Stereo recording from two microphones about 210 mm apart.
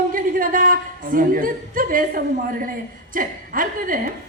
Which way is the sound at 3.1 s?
40° right (ahead or behind).